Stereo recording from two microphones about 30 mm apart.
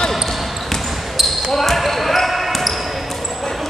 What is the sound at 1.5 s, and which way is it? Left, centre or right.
Basketball bounce, centre.